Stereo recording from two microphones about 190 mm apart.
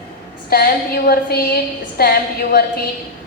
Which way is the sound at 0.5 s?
55° left (ahead or behind).